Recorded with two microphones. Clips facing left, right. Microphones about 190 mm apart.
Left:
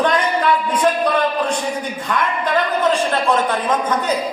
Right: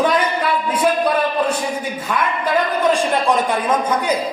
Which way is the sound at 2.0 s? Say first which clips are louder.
Left 1 dB; 10° right (ahead or behind).